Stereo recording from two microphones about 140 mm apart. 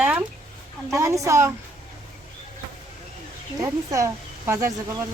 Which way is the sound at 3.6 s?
20° right (ahead or behind).